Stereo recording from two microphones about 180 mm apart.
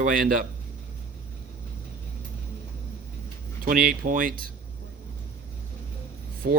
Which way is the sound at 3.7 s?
50° right (ahead or behind).